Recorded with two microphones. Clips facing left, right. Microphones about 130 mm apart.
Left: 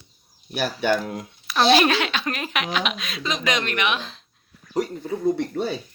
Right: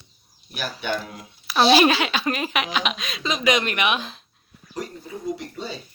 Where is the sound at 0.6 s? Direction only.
55° left (ahead or behind).